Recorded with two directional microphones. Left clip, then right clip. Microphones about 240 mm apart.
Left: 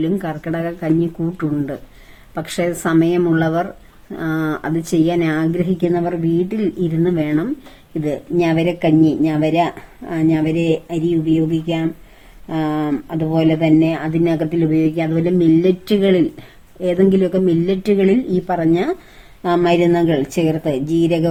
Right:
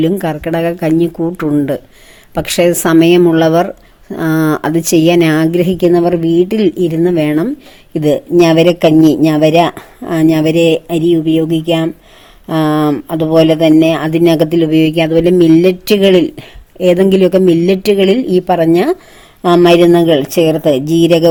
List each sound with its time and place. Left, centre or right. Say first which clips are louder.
0.0 s speech: right 7 dB; right